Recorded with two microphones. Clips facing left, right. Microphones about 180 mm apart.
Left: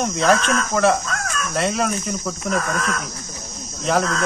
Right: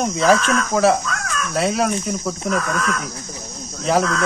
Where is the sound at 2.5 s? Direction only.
40° left (ahead or behind).